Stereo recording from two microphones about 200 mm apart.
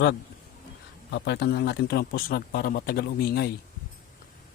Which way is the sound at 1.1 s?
55° left (ahead or behind).